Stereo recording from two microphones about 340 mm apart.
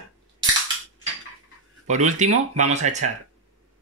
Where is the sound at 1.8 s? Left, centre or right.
Right.